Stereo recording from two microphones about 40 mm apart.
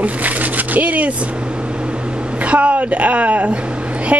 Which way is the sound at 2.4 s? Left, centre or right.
Right.